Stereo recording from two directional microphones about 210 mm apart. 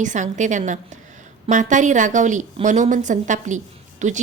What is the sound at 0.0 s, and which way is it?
A woman's voice, 35° right (ahead or behind).